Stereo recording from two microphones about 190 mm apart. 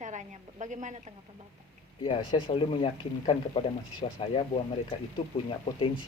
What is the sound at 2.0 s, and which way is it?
Speech, 25° left (ahead or behind).